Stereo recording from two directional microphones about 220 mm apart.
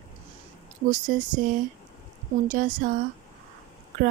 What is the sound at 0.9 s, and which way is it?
Speech, 35° right (ahead or behind).